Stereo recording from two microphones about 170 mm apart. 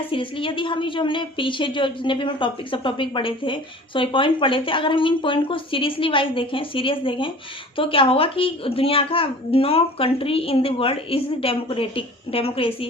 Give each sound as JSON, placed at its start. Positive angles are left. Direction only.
{"t": 0.1, "sound": "a woman's voice", "side_deg": 30}